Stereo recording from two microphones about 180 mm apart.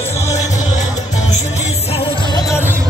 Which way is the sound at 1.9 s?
25° left (ahead or behind).